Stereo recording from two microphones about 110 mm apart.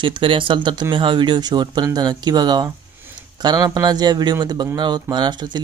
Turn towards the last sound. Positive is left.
turn(degrees=-40)  # may be behind; listen again after turning